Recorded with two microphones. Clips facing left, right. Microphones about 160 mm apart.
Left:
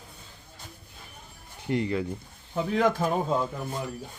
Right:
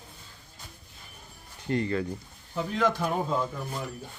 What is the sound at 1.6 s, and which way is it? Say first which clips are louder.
Speech: left 1 dB; 20° left (ahead or behind).